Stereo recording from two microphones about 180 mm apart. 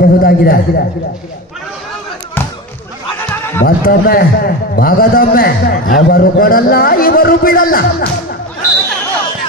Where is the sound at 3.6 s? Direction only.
55° left (ahead or behind).